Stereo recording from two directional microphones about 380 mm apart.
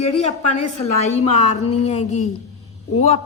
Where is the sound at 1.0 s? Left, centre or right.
Centre.